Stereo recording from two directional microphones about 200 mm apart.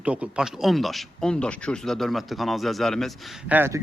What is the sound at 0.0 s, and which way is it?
Speech, 5° right (ahead or behind).